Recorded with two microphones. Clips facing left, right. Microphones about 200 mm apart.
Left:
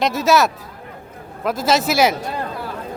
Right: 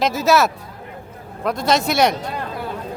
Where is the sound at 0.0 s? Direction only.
Centre (ahead or behind).